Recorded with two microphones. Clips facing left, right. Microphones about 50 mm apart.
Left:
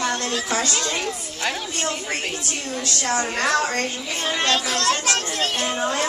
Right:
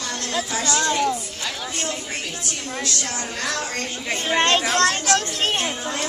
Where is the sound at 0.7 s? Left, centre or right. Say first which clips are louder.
Right 4 dB; right.